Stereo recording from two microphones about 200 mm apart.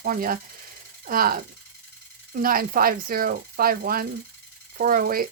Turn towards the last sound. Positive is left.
turn(degrees=-45)  # may be behind; listen again after turning